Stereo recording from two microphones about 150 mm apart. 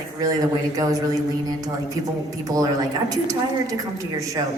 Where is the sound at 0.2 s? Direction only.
25° right (ahead or behind).